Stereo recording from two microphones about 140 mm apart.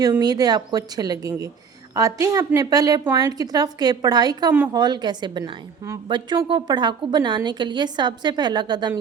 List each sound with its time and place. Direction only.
0.2 s a woman's voice: 30° right (ahead or behind)